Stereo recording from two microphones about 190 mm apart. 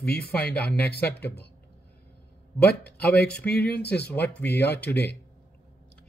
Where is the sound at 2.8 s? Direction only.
55° left (ahead or behind).